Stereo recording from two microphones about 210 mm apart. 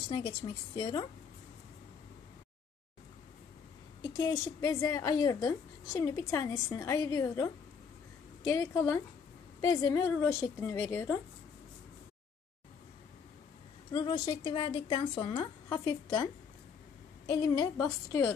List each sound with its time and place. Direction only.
0.1 s a woman's voice: 25° left (ahead or behind)
4.2 s a woman's voice: 15° left (ahead or behind)
8.5 s a woman's voice: 15° left (ahead or behind)
13.9 s a woman's voice: 25° left (ahead or behind)
17.3 s a woman's voice: 15° left (ahead or behind)